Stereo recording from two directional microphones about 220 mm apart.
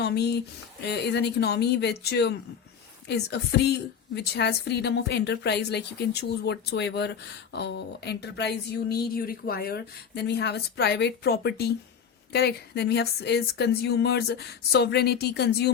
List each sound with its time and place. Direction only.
0.0 s a woman's voice: 50° left (ahead or behind)